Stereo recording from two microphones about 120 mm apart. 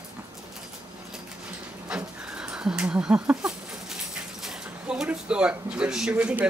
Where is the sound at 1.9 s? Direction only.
5° right (ahead or behind).